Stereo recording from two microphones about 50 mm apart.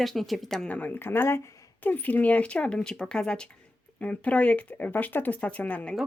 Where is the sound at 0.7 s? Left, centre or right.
Left; by 3.5 s centre.